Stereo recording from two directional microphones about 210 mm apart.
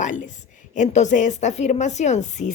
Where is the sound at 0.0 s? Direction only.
35° left (ahead or behind).